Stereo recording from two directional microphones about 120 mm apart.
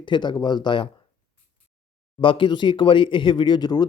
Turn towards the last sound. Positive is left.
turn(degrees=35)  # may be behind; listen again after turning